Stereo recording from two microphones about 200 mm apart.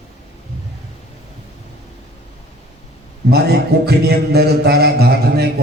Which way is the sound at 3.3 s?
55° right (ahead or behind).